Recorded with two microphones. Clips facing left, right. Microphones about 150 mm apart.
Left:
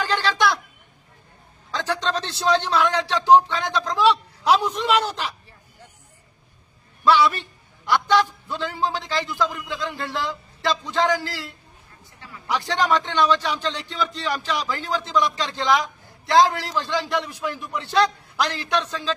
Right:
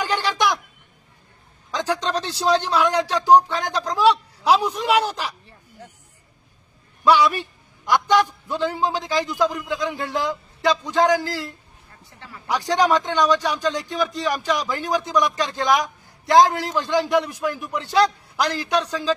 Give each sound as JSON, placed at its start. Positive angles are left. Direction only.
{"t": 0.0, "sound": "a sound", "side_deg": -15}
{"t": 1.7, "sound": "a man's voice", "side_deg": -15}
{"t": 7.1, "sound": "a man's voice", "side_deg": -15}
{"t": 12.7, "sound": "a man's voice", "side_deg": -15}
{"t": 15.7, "sound": "a sound", "side_deg": -15}
{"t": 16.4, "sound": "a man's voice", "side_deg": -15}